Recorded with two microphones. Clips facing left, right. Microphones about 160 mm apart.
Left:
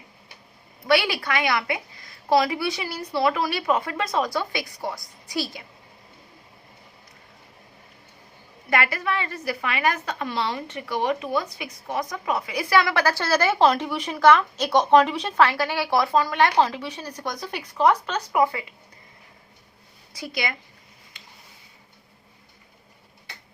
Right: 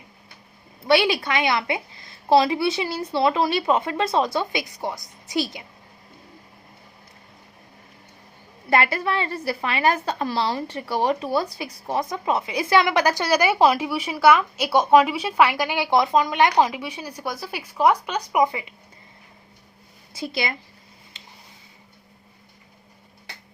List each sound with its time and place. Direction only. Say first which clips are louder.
0.9 s a woman's voice: right 3 dB; 25° right (ahead or behind)
8.7 s a woman's voice: right 3 dB; 30° right (ahead or behind)
20.1 s a woman's voice: right 2 dB; 25° right (ahead or behind)